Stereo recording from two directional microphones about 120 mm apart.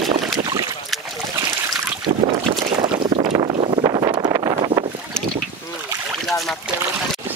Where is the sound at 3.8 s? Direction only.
35° right (ahead or behind).